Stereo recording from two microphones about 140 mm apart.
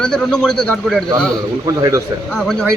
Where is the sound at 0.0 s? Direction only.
5° left (ahead or behind).